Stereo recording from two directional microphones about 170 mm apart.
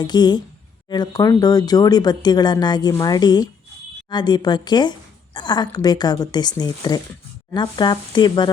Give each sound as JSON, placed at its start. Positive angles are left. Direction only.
{"t": 0.0, "sound": "a woman's voice", "side_deg": 25}